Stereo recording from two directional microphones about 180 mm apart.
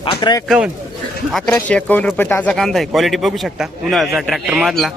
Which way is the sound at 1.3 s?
Centre (ahead or behind).